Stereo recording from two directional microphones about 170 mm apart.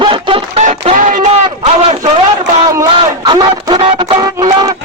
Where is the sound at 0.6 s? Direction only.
45° right (ahead or behind).